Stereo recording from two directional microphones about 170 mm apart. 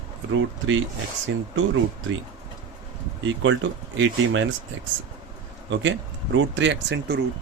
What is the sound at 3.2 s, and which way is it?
Speech, 90° right.